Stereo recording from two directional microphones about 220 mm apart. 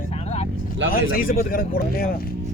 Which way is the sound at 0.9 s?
40° left (ahead or behind).